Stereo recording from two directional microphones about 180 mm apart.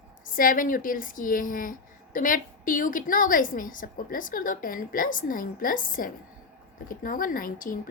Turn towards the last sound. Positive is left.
turn(degrees=50)  # may be behind; listen again after turning